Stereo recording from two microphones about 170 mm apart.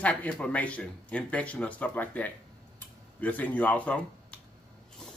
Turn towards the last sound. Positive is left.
turn(degrees=5)  # may be behind; listen again after turning